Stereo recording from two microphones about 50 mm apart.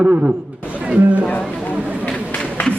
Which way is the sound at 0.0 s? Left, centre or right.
Right.